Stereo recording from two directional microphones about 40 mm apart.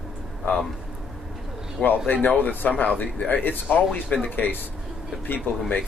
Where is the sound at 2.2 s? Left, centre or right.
Left.